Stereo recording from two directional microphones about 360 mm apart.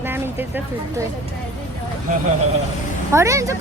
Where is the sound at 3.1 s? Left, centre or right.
Centre.